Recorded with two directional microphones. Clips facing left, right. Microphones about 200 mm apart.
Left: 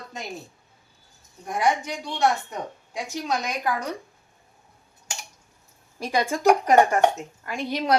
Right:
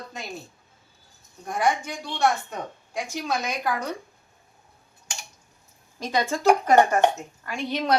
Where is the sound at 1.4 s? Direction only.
15° left (ahead or behind).